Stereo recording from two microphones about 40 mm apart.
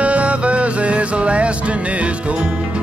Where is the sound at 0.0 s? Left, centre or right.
Right.